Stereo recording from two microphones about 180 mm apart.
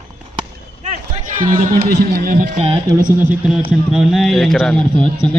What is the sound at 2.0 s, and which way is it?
Speech, 60° right (ahead or behind).